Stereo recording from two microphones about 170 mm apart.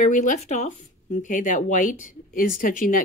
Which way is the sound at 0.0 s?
50° left (ahead or behind).